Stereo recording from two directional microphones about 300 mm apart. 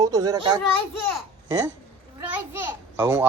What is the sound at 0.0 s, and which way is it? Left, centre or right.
Speech, centre.